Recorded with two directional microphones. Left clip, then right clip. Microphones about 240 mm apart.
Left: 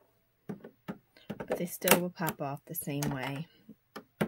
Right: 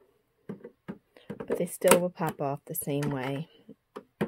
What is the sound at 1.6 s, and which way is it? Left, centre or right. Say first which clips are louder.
Speech: right 6 dB; right.